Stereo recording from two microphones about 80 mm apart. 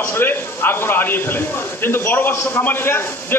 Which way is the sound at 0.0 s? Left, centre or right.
Left.